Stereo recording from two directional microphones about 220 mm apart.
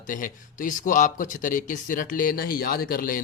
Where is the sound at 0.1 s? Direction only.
35° left (ahead or behind).